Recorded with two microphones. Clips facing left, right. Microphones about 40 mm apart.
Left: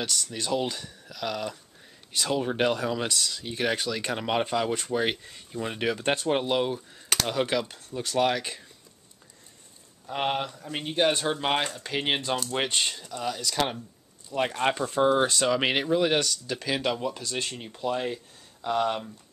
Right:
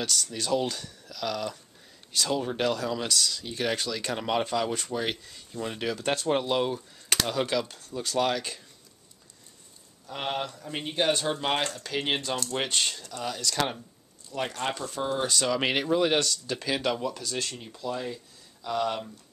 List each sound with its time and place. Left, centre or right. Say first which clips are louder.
0.0 s speech: even; centre
6.6 s speech: even; centre
7.4 s speech: left 1 dB; centre
10.0 s speech: left 3 dB; centre
12.4 s speech: left 1 dB; centre
17.0 s speech: left 1 dB; left